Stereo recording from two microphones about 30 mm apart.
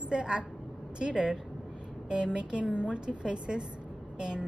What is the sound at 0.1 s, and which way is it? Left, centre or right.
A woman's voice, right.